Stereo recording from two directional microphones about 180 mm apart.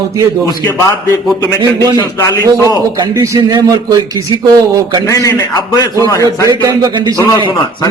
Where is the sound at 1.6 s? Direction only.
20° right (ahead or behind).